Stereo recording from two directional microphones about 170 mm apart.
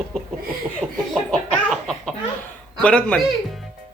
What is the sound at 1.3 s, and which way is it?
Laughter, 5° left (ahead or behind).